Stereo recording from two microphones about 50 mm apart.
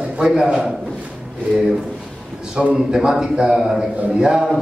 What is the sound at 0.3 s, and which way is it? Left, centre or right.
Speech, centre.